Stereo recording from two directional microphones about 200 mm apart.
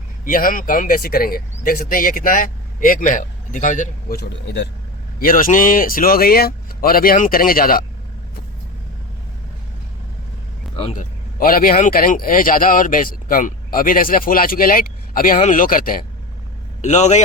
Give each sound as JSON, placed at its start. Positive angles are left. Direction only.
{"t": 0.3, "sound": "speech", "side_deg": 45}
{"t": 4.2, "sound": "a man's voice", "side_deg": 60}
{"t": 5.2, "sound": "speech", "side_deg": 45}
{"t": 10.8, "sound": "speech", "side_deg": 30}
{"t": 11.3, "sound": "a man's voice", "side_deg": 45}